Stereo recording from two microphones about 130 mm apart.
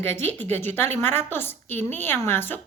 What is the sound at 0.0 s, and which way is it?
A woman's voice, 15° left (ahead or behind).